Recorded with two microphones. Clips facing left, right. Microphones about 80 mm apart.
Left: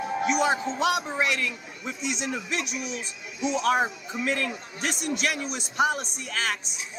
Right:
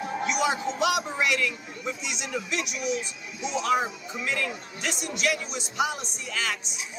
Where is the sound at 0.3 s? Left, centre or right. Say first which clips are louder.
Left 2 dB; left.